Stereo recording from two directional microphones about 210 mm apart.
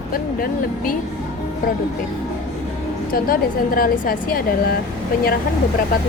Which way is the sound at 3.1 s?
45° left (ahead or behind).